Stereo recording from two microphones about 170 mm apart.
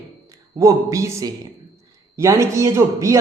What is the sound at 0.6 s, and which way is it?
A man's voice, 20° right (ahead or behind).